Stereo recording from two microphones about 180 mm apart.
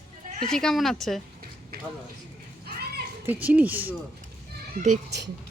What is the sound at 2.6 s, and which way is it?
Children playing, 60° right (ahead or behind).